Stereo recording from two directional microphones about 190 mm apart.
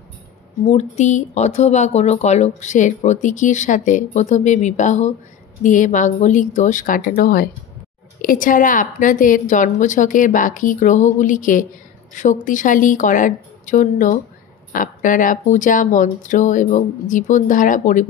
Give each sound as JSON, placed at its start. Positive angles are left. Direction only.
{"t": 0.7, "sound": "a woman's voice", "side_deg": 35}